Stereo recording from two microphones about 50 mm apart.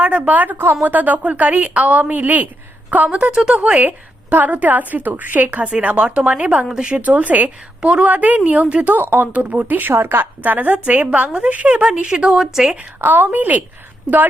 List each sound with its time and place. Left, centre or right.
0.0 s a woman's voice: right
0.6 s a woman's voice: right
0.9 s a woman's voice: right
3.3 s speech: centre
3.6 s a woman's voice: right
5.6 s a woman's voice: right
7.0 s a woman's voice: right
9.3 s a woman's voice: right
9.9 s a woman's voice: right
10.4 s a woman's voice: right; by 12.7 s centre
13.0 s a woman's voice: right